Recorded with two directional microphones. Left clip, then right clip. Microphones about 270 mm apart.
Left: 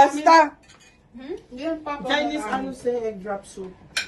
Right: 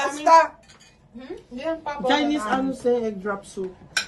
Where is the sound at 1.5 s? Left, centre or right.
Centre.